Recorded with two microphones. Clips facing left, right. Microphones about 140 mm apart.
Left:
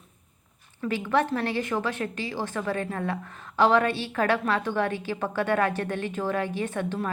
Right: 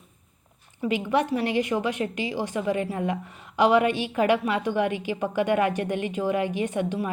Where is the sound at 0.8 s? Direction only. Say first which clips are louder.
Right 1 dB; 15° right (ahead or behind).